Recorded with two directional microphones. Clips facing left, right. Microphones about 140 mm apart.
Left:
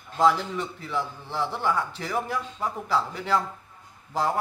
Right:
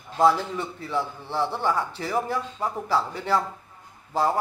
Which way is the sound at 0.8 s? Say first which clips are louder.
Right 2 dB; 15° right (ahead or behind).